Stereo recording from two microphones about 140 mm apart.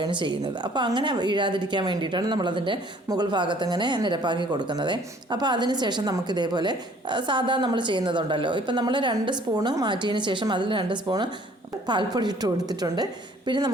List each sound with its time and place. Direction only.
0.0 s a woman's voice: 35° right (ahead or behind)